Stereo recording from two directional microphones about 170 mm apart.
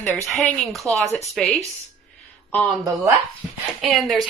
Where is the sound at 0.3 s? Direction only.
Centre (ahead or behind).